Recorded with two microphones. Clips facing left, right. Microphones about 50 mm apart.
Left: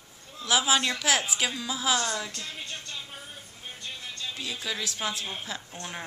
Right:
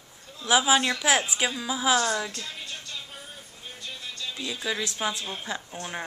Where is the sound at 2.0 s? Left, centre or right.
Centre.